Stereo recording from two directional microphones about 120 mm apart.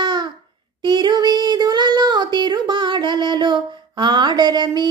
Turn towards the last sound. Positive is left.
turn(degrees=-35)  # may be behind; listen again after turning